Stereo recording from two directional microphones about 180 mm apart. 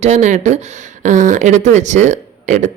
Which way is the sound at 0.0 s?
40° right (ahead or behind).